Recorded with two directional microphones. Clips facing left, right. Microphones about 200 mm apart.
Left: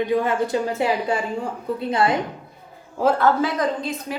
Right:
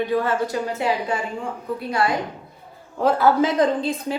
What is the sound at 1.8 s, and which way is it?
Speech, 25° left (ahead or behind).